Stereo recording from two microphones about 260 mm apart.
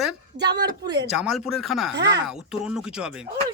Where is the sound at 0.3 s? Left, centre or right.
Right.